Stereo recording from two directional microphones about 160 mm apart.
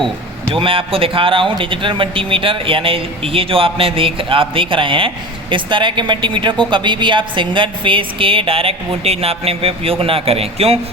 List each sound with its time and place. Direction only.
0.5 s speech: 35° right (ahead or behind)